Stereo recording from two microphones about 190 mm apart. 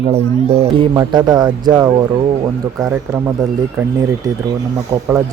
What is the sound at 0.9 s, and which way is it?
Speech, 20° right (ahead or behind).